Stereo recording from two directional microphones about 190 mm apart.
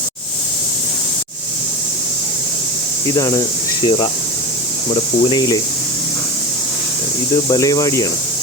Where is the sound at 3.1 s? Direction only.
20° left (ahead or behind).